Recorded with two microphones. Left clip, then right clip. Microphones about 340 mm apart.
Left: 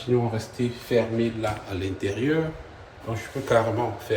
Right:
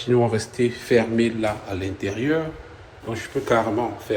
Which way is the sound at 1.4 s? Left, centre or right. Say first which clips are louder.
Right 4 dB; right.